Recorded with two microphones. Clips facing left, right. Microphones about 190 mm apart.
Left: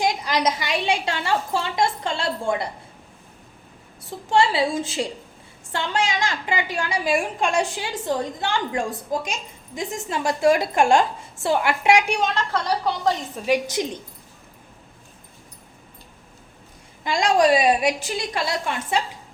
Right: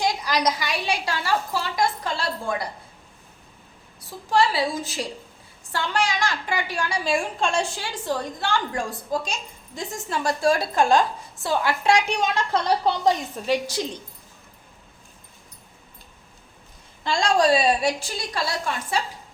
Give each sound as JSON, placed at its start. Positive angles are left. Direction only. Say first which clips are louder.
{"t": 0.0, "sound": "a woman's voice", "louder": "left 1 dB", "side_deg": 20}
{"t": 4.3, "sound": "a woman's voice", "louder": "left 2 dB", "side_deg": 25}
{"t": 12.5, "sound": "a woman's voice", "louder": "right 2 dB", "side_deg": -20}
{"t": 13.4, "sound": "a woman's voice", "louder": "left 5 dB", "side_deg": 15}
{"t": 17.0, "sound": "a woman's voice", "louder": "left 2 dB", "side_deg": 15}